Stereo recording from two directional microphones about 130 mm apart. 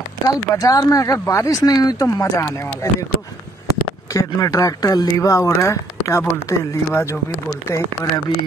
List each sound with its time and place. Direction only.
0.3 s speech: 25° left (ahead or behind)
4.1 s speech: 25° left (ahead or behind)